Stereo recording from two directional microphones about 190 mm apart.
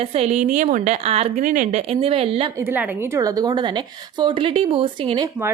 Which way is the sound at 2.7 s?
10° right (ahead or behind).